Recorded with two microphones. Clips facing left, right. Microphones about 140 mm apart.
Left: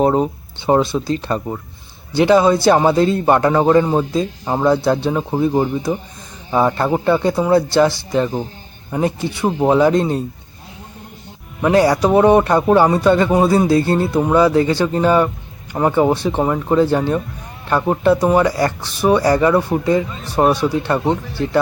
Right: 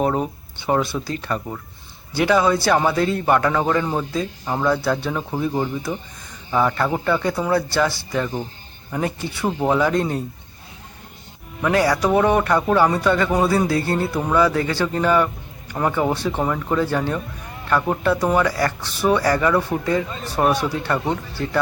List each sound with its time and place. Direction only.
0.0 s a man's voice: 25° left (ahead or behind)
11.6 s a man's voice: 25° left (ahead or behind)